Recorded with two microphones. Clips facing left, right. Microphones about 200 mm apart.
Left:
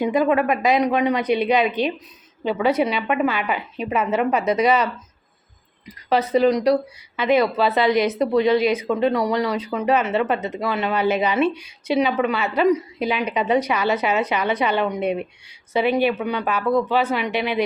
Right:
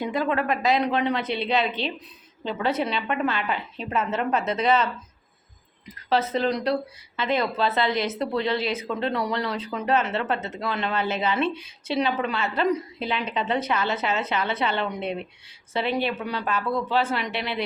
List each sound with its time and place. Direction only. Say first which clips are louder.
0.0 s speech: left 7 dB; 15° left (ahead or behind)
6.1 s speech: left 6 dB; 15° left (ahead or behind)
16.2 s speech: left 5 dB; 60° left (ahead or behind)